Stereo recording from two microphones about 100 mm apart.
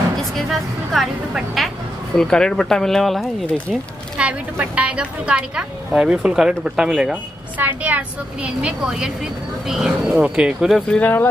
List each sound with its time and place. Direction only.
0.5 s speech: centre (ahead or behind)
4.2 s a woman's voice: 10° right (ahead or behind)
7.5 s a woman's voice: 15° right (ahead or behind)
10.9 s speech: 15° left (ahead or behind)